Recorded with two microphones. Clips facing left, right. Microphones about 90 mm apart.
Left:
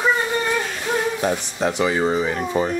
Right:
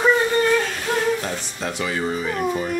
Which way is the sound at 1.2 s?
20° left (ahead or behind).